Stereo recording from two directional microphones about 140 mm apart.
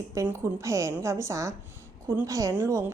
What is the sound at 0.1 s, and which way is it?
A woman's voice, 20° right (ahead or behind).